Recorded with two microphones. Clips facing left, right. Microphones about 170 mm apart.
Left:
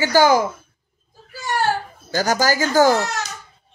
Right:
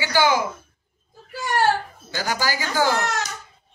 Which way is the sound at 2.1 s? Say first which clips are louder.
Left 7 dB; 45° left (ahead or behind).